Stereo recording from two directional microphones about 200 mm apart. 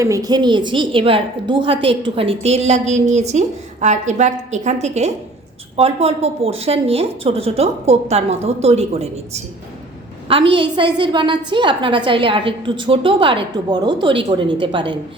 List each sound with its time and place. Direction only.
0.0 s a woman's voice: 15° right (ahead or behind)